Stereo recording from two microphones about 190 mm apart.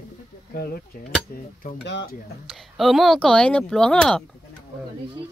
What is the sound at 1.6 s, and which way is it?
Speech, 65° left (ahead or behind).